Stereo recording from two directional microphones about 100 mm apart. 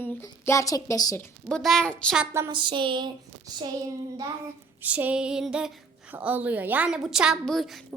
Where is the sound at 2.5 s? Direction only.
55° right (ahead or behind).